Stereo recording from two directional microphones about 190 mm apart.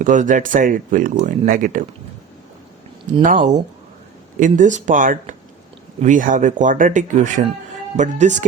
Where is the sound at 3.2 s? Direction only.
40° right (ahead or behind).